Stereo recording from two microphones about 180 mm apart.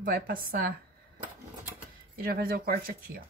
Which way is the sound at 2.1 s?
55° right (ahead or behind).